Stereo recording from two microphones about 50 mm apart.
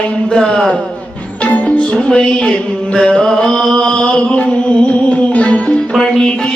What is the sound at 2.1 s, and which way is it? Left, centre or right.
Music, centre.